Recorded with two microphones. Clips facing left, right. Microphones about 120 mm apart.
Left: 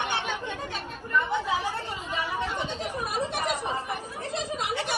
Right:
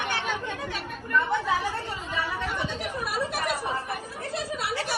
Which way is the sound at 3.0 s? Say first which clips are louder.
Even; 25° left (ahead or behind).